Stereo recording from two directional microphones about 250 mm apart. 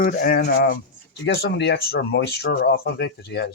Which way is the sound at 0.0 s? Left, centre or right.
Left.